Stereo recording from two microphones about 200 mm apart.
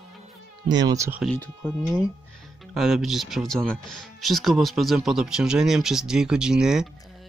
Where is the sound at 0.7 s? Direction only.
20° right (ahead or behind).